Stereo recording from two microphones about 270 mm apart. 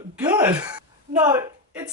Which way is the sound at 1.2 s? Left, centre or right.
Centre.